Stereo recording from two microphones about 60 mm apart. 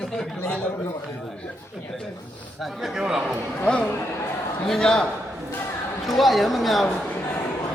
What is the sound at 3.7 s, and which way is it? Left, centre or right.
Speech, centre.